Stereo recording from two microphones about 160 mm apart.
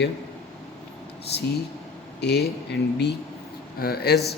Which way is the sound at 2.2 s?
90° left.